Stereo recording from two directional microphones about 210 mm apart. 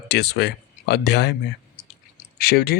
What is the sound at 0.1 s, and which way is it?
Speech, 50° left (ahead or behind).